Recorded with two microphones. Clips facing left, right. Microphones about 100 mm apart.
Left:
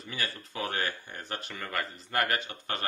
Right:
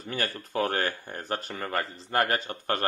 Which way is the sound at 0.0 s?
50° right (ahead or behind).